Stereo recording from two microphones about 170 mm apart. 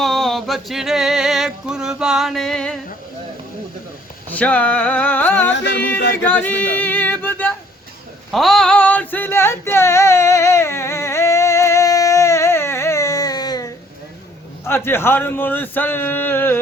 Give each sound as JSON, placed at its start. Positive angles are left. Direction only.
{"t": 0.0, "sound": "a sound", "side_deg": 0}
{"t": 4.3, "sound": "speech", "side_deg": 10}
{"t": 5.5, "sound": "music", "side_deg": 90}
{"t": 6.2, "sound": "a sound", "side_deg": 10}
{"t": 8.3, "sound": "female singing", "side_deg": 0}
{"t": 14.6, "sound": "speech", "side_deg": 15}